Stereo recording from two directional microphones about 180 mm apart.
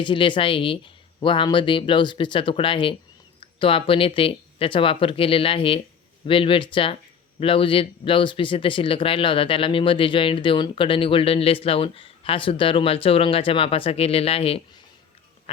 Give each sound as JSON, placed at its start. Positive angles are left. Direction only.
{"t": 0.0, "sound": "speech", "side_deg": 25}